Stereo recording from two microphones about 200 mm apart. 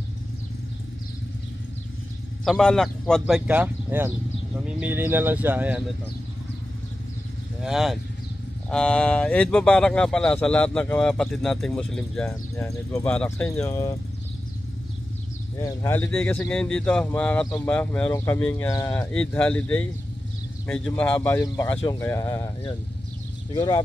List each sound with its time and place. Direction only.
2.4 s speech: centre (ahead or behind)
7.6 s speech: centre (ahead or behind)
12.3 s speech: 15° left (ahead or behind)
15.6 s speech: 10° left (ahead or behind)